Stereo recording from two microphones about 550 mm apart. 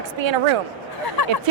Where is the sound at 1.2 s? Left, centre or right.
Left.